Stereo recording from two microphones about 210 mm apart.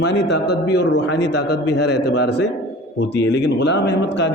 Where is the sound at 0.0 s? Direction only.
55° left (ahead or behind).